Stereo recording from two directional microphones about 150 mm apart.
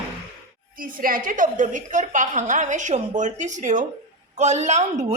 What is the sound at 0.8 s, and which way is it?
A woman's voice, 65° right (ahead or behind).